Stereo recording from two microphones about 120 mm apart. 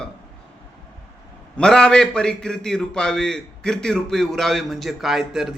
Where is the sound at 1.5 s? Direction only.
5° left (ahead or behind).